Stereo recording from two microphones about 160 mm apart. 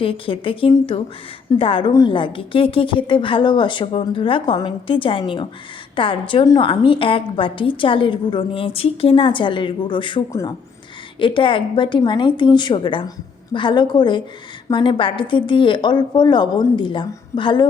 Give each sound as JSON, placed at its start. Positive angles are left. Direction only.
{"t": 0.0, "sound": "a woman's voice", "side_deg": 35}